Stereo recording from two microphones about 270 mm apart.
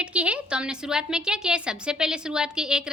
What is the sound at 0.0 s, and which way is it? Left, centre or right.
A woman's voice, centre.